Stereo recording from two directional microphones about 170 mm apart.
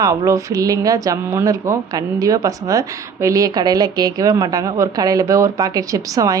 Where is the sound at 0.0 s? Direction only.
20° right (ahead or behind).